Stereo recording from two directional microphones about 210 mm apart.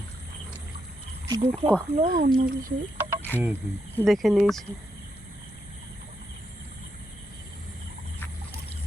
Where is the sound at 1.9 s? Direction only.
35° right (ahead or behind).